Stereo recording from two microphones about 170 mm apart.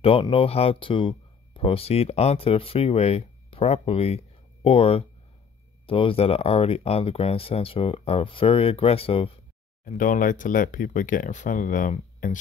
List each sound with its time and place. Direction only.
0.0 s speech: 30° left (ahead or behind)
9.8 s speech: 50° left (ahead or behind)